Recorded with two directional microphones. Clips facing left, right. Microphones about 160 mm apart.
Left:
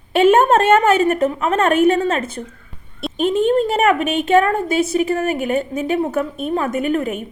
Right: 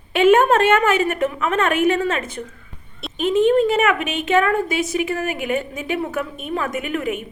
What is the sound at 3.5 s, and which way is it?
A woman's voice, 35° left (ahead or behind).